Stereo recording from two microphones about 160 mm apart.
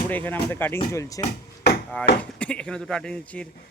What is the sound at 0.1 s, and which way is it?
A man's voice, 10° left (ahead or behind).